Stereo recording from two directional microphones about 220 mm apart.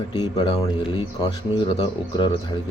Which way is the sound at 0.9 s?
20° left (ahead or behind).